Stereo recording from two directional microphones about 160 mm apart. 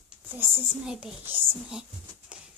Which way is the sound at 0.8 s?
5° right (ahead or behind).